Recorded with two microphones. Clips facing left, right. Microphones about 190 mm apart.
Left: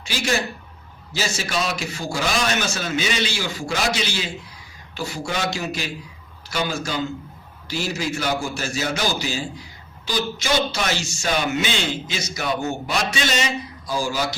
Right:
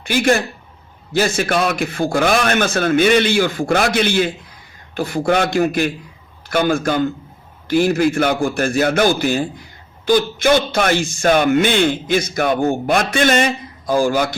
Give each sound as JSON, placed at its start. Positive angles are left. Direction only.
{"t": 0.0, "sound": "speech", "side_deg": -55}